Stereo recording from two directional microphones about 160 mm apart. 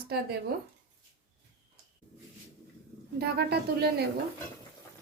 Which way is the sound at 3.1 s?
85° right.